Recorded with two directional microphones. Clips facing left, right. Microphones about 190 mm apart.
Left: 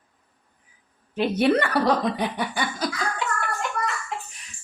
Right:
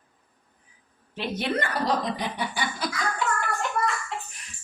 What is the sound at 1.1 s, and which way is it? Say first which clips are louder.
Speech: left 8 dB; 55° left (ahead or behind).